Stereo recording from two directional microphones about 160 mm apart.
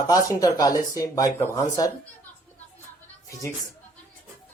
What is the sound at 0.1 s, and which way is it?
Speech, 20° left (ahead or behind).